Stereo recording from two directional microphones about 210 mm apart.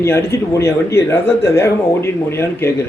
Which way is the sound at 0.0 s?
15° left (ahead or behind).